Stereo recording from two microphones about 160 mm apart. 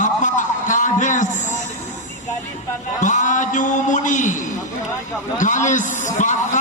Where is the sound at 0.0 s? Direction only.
50° left (ahead or behind).